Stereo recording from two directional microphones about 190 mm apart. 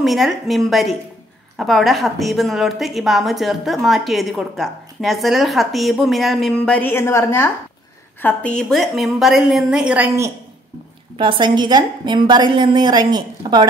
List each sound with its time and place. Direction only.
0.0 s a woman's voice: centre (ahead or behind)
11.1 s a woman's voice: 25° right (ahead or behind)